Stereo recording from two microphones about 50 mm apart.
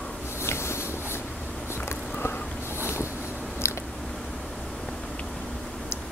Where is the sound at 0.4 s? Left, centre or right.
Left.